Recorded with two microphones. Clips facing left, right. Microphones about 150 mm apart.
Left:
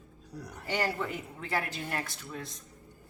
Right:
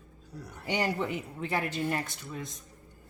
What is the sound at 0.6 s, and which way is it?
A woman's voice, 15° right (ahead or behind).